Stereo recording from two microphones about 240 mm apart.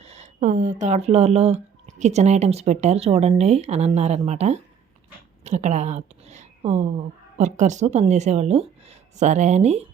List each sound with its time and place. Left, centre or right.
0.0 s a woman's voice: right